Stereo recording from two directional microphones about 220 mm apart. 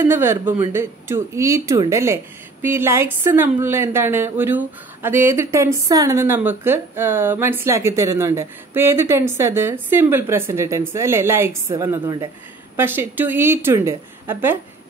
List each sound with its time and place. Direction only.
0.0 s a woman's voice: 10° right (ahead or behind)